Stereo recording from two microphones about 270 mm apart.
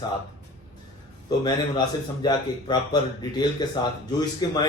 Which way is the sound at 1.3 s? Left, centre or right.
Centre.